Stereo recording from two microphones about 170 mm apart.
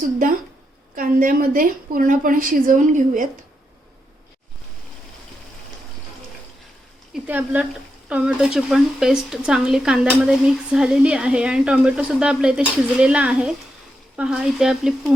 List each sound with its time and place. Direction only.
0.9 s a woman's voice: 55° right (ahead or behind)
7.3 s speech: 10° right (ahead or behind)